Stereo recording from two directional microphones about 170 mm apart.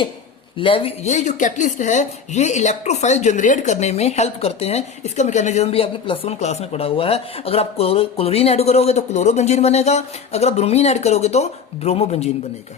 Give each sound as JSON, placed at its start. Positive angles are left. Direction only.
{"t": 0.5, "sound": "speech", "side_deg": 30}